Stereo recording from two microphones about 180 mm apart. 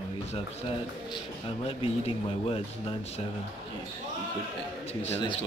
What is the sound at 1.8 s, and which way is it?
Speech, 30° left (ahead or behind).